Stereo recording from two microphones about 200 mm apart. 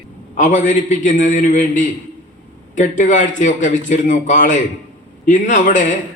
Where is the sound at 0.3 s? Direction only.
40° left (ahead or behind).